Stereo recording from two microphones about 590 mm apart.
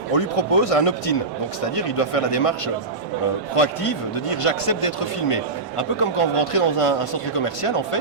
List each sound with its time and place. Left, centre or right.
0.1 s speech: left